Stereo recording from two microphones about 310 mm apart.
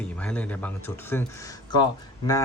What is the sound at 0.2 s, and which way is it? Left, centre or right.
Speech, centre.